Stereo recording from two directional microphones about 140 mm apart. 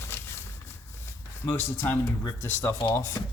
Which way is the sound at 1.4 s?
15° left (ahead or behind).